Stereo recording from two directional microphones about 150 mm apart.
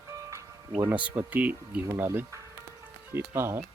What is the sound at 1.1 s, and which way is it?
Speech, 10° right (ahead or behind).